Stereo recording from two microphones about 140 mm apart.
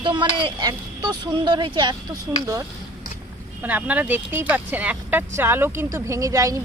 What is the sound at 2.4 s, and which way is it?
Speech, 20° right (ahead or behind).